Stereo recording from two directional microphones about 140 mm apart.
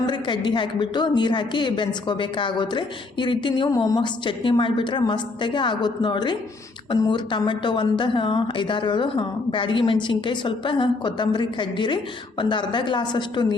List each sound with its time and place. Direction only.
0.0 s a woman's voice: 35° left (ahead or behind)